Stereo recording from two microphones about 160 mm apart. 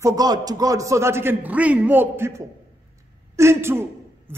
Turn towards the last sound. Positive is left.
turn(degrees=-15)  # may be behind; listen again after turning